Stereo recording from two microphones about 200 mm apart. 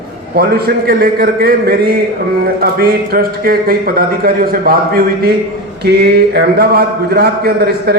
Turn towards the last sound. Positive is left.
turn(degrees=-50)  # may be behind; listen again after turning